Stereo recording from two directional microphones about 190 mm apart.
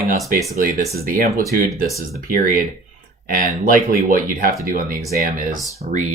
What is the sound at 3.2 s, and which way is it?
Speech, 45° right (ahead or behind).